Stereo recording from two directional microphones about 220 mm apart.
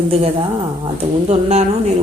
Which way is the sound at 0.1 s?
25° right (ahead or behind).